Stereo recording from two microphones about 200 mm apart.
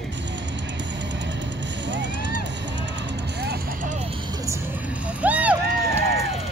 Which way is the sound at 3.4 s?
55° right (ahead or behind).